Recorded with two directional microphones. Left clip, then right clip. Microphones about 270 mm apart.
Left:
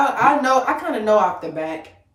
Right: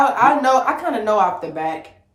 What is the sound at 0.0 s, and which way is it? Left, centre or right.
A woman's voice, centre.